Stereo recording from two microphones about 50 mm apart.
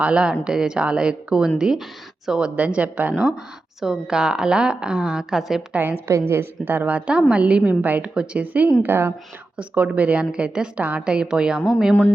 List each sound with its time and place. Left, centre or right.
0.0 s a woman's voice: right
3.8 s a woman's voice: centre
6.1 s a woman's voice: right
6.8 s a woman's voice: right
8.1 s a woman's voice: centre
8.4 s speech: right
8.8 s a woman's voice: right
9.6 s a woman's voice: right; by 11.6 s centre